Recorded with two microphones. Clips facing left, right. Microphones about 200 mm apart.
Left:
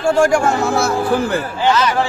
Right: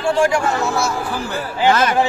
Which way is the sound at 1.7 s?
50° right (ahead or behind).